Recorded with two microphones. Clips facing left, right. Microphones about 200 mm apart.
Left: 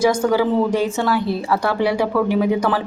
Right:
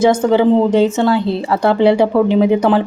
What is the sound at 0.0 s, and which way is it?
Speech, 25° right (ahead or behind).